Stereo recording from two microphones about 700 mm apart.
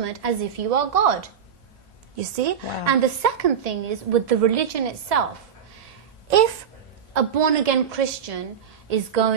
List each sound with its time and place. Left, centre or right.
0.0 s a woman's voice: right
2.1 s a woman's voice: right
7.2 s a woman's voice: right